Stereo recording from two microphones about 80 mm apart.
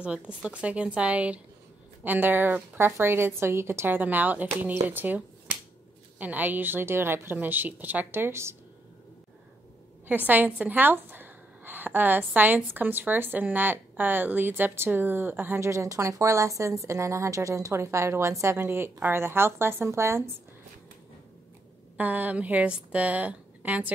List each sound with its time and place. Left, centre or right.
0.0 s a woman's voice: centre; by 8.5 s right
10.0 s a woman's voice: right
21.9 s a woman's voice: right